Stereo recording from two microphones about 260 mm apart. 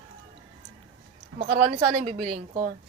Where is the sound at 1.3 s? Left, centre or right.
Right.